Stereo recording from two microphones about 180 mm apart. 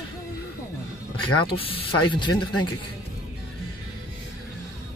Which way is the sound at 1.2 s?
30° left (ahead or behind).